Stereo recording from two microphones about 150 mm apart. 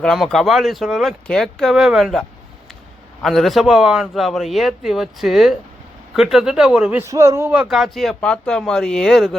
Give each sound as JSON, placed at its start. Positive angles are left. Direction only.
{"t": 0.0, "sound": "a man's voice", "side_deg": 5}
{"t": 3.2, "sound": "a man's voice", "side_deg": 0}
{"t": 7.0, "sound": "a man's voice", "side_deg": -20}
{"t": 7.5, "sound": "a man's voice", "side_deg": -5}